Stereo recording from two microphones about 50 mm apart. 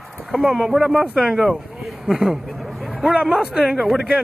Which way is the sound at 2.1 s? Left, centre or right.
Centre.